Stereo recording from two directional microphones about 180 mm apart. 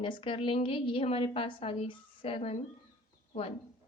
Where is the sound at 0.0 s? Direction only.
30° left (ahead or behind).